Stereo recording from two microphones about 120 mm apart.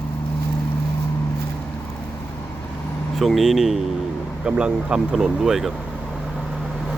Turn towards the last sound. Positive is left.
turn(degrees=-5)  # may be behind; listen again after turning